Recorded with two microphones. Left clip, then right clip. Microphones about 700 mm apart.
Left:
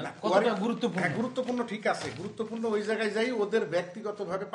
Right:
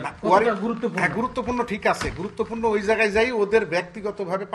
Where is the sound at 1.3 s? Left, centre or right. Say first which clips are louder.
Right 6 dB; right.